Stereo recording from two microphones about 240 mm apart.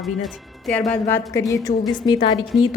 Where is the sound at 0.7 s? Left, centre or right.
Centre.